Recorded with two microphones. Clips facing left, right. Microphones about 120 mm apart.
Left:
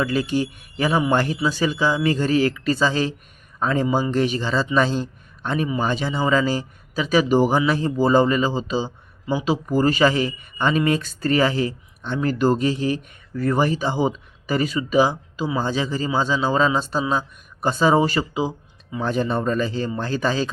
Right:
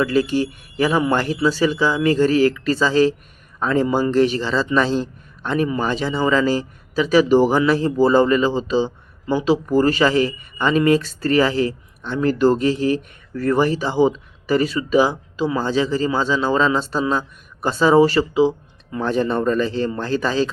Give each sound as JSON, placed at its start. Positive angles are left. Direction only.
{"t": 0.0, "sound": "speech", "side_deg": 20}